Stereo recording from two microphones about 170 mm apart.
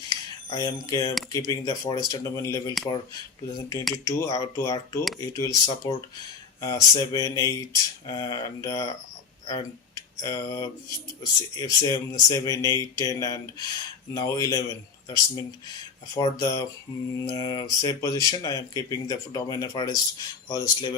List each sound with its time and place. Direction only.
0.5 s speech: 20° left (ahead or behind)
3.9 s speech: 20° left (ahead or behind)